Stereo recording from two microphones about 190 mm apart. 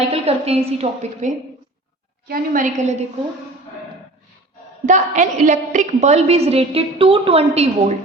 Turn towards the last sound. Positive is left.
turn(degrees=-35)  # may be behind; listen again after turning